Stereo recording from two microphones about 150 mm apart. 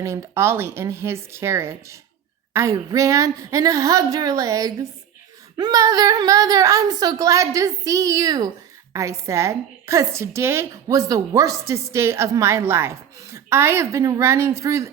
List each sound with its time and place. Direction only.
0.0 s a woman's voice: 20° right (ahead or behind)